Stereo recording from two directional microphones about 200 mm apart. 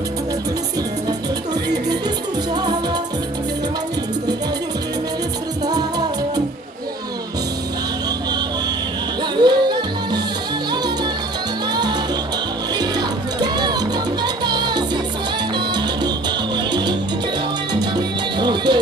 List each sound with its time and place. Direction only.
2.5 s music: 20° right (ahead or behind)
5.7 s music: 20° right (ahead or behind)
9.4 s music: 20° right (ahead or behind)
11.7 s music: 20° right (ahead or behind)
15.5 s salsa music: 20° right (ahead or behind)
17.9 s music: 20° right (ahead or behind)